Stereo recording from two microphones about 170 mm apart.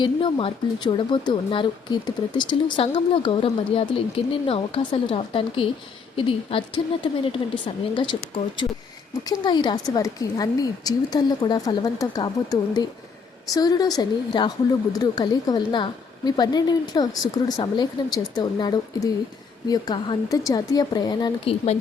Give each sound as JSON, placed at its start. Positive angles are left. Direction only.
{"t": 0.0, "sound": "speech", "side_deg": 30}